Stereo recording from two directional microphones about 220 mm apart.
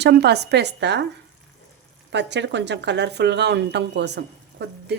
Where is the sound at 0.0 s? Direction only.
50° right (ahead or behind).